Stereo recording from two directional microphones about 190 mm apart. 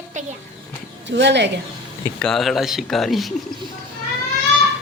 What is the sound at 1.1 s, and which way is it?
Speech, 65° right (ahead or behind).